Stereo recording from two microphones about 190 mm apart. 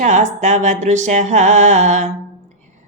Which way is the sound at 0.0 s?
40° right (ahead or behind).